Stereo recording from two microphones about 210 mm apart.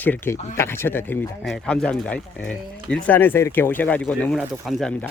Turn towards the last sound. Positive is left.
turn(degrees=5)  # may be behind; listen again after turning